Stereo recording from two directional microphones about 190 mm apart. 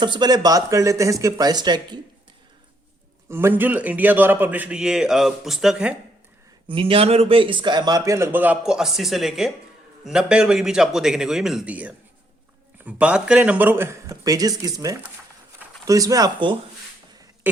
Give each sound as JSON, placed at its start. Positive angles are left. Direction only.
{"t": 0.0, "sound": "speech", "side_deg": -25}
{"t": 3.2, "sound": "a man's voice", "side_deg": -10}
{"t": 6.7, "sound": "a man's voice", "side_deg": -30}
{"t": 15.9, "sound": "speech", "side_deg": -20}
{"t": 17.5, "sound": "speech", "side_deg": -10}